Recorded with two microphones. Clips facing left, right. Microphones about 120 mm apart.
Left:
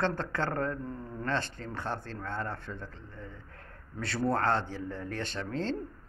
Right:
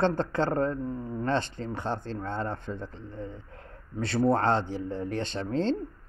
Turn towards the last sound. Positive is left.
turn(degrees=-25)  # may be behind; listen again after turning